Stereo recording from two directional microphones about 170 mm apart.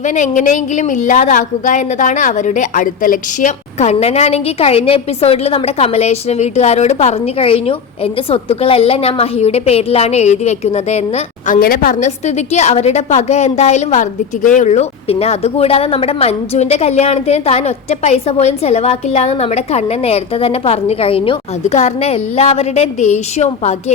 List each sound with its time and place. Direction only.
0.0 s a woman's voice: 45° left (ahead or behind)